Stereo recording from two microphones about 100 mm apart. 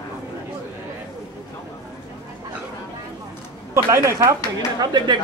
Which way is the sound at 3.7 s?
30° right (ahead or behind).